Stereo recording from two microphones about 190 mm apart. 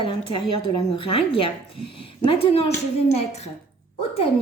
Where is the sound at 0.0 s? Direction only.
25° left (ahead or behind).